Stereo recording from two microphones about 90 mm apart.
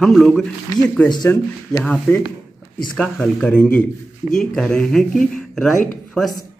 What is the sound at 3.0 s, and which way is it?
Speech, 5° left (ahead or behind).